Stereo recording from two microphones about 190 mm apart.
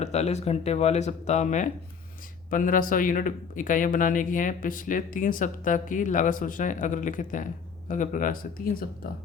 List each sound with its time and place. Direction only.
0.0 s speech: 35° left (ahead or behind)